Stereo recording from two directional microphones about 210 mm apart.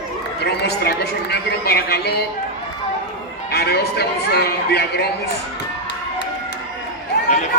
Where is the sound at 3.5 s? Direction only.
50° left (ahead or behind).